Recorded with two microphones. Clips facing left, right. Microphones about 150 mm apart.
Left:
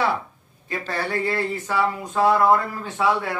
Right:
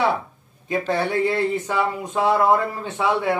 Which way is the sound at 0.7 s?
20° right (ahead or behind).